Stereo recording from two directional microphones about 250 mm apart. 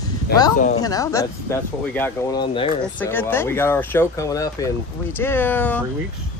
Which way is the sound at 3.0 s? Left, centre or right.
Centre.